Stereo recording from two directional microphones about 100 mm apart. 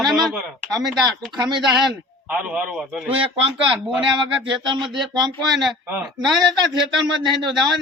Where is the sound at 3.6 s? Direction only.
55° right (ahead or behind).